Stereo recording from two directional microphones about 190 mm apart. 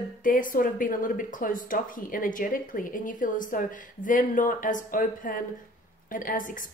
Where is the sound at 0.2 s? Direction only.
45° left (ahead or behind).